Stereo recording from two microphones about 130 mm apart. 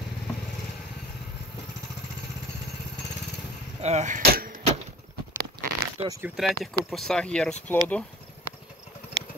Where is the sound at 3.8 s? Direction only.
60° right (ahead or behind).